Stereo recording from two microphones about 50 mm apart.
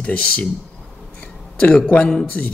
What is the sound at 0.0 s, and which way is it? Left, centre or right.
Speech, left.